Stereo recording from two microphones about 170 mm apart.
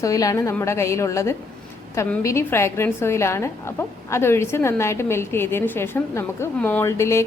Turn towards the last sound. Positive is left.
turn(degrees=15)  # may be behind; listen again after turning